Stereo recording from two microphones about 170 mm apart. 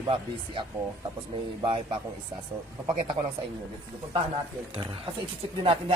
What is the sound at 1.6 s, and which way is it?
Speech, 30° right (ahead or behind).